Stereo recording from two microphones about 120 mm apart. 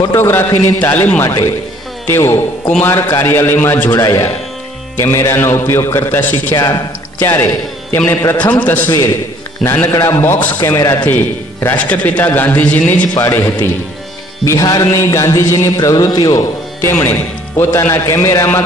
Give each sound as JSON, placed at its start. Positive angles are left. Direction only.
{"t": 0.1, "sound": "music", "side_deg": 20}
{"t": 7.2, "sound": "speech", "side_deg": 20}
{"t": 8.1, "sound": "music", "side_deg": 20}
{"t": 8.5, "sound": "a man's voice", "side_deg": 15}
{"t": 9.6, "sound": "music", "side_deg": 20}
{"t": 11.1, "sound": "a man's voice", "side_deg": 15}
{"t": 14.4, "sound": "music", "side_deg": 25}
{"t": 16.8, "sound": "music", "side_deg": 25}